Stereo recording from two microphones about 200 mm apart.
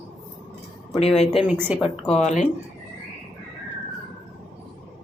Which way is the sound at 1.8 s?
30° left (ahead or behind).